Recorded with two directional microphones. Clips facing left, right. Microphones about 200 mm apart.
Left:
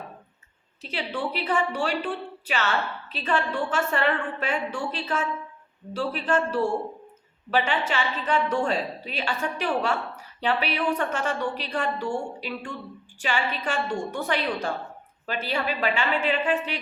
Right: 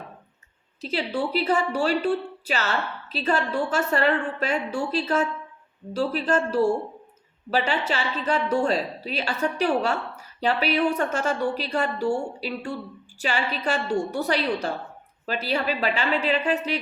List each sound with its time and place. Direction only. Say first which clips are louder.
0.8 s a woman's voice: right 4 dB; 40° right (ahead or behind)